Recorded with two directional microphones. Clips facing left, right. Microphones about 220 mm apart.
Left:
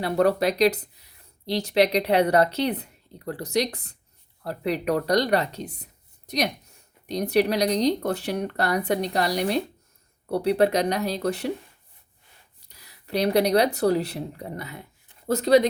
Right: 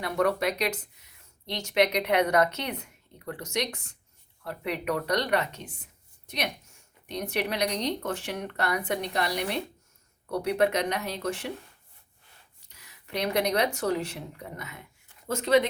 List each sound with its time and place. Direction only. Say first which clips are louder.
0.0 s speech: left 5 dB; 35° left (ahead or behind)
12.6 s speech: left 5 dB; 35° left (ahead or behind)